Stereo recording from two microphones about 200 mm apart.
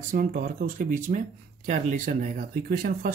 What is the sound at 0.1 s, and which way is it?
Speech, 40° right (ahead or behind).